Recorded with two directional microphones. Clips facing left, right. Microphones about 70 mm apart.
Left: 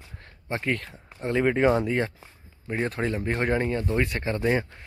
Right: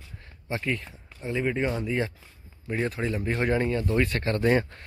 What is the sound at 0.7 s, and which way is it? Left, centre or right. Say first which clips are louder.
Speech: left 2 dB; left.